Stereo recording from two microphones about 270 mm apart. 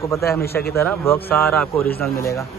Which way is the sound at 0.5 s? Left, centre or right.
Left.